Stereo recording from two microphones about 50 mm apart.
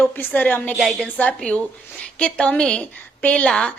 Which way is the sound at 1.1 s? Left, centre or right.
Left.